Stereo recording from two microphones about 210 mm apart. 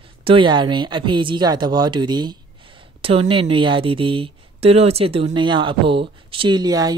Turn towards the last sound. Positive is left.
turn(degrees=-20)  # may be behind; listen again after turning